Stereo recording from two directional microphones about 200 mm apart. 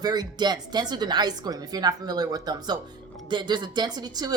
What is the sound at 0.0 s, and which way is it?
Speech, 20° right (ahead or behind).